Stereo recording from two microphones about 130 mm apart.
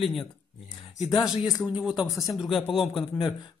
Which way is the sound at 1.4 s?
5° right (ahead or behind).